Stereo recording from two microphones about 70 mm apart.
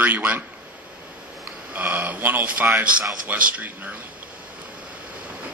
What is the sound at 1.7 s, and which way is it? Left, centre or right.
Speech, right.